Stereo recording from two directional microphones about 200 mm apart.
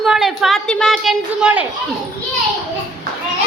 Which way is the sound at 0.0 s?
Centre (ahead or behind).